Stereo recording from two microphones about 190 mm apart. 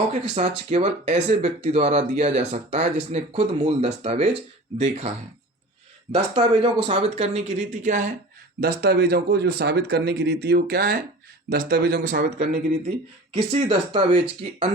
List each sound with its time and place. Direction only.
0.1 s speech: 35° right (ahead or behind)
8.6 s speech: 55° right (ahead or behind)
13.3 s speech: 30° right (ahead or behind)